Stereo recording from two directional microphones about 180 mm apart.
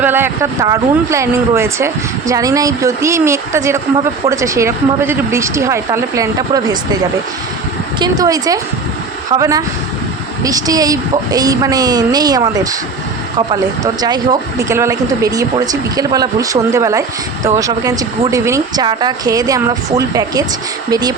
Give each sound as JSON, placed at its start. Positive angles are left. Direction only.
{"t": 0.0, "sound": "speech", "side_deg": -10}
{"t": 7.9, "sound": "speech", "side_deg": -25}